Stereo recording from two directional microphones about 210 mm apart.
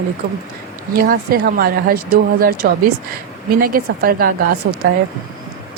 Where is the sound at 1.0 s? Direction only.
45° right (ahead or behind).